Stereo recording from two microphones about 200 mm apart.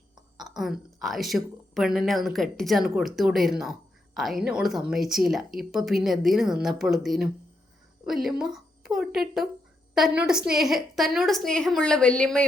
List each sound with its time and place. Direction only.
0.3 s a woman's voice: centre (ahead or behind)